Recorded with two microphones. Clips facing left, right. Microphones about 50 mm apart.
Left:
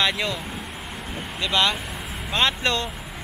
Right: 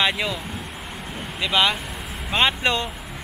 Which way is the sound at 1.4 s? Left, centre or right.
Centre.